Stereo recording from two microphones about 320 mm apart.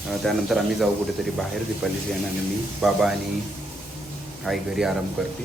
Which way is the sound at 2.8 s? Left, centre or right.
Centre.